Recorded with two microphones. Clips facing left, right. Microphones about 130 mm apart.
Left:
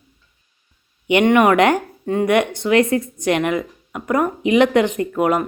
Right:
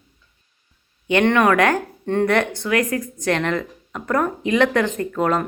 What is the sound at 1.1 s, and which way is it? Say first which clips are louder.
Speech: left 3 dB; 15° left (ahead or behind).